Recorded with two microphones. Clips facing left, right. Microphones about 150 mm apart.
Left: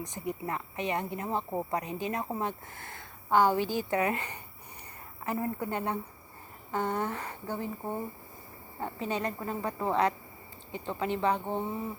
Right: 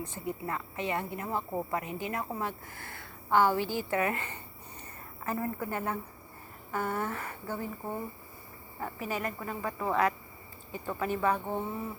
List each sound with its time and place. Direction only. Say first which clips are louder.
0.0 s a woman's voice: left 1 dB; 15° left (ahead or behind)